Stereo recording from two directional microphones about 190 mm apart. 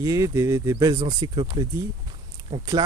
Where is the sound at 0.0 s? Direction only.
15° right (ahead or behind).